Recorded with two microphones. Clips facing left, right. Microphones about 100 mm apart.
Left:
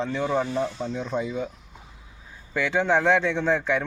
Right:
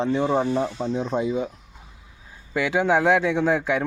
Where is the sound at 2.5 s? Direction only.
10° right (ahead or behind).